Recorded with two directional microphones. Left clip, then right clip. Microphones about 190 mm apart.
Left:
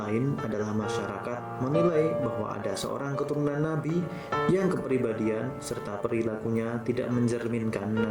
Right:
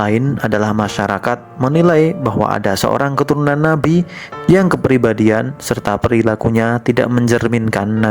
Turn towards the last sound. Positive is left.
turn(degrees=-55)  # may be behind; listen again after turning